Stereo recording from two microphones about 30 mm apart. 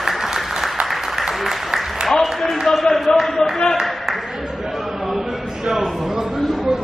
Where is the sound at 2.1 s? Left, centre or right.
Centre.